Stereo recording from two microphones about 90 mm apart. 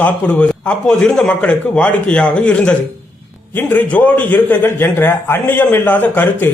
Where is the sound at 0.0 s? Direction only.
15° left (ahead or behind).